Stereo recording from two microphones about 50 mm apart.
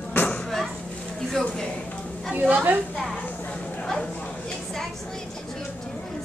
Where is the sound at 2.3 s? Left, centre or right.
Right.